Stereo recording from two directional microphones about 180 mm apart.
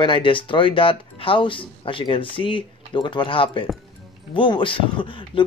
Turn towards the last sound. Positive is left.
turn(degrees=25)  # may be behind; listen again after turning